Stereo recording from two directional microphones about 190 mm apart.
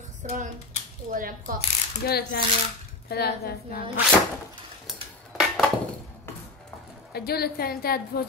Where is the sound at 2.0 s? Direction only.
55° left (ahead or behind).